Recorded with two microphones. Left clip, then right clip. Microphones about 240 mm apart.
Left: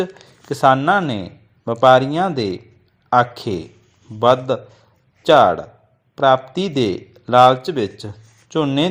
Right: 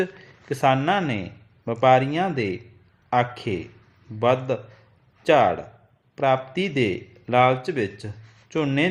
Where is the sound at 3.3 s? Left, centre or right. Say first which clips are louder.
Left 4 dB; centre.